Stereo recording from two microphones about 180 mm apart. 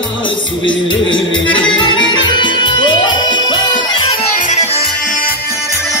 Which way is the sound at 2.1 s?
25° left (ahead or behind).